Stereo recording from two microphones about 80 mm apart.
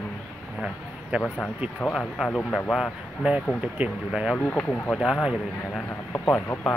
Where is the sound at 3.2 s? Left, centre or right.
Centre.